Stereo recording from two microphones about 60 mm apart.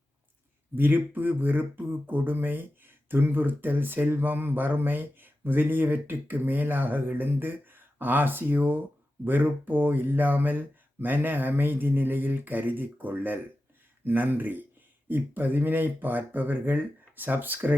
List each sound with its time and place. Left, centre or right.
0.8 s beatboxing: right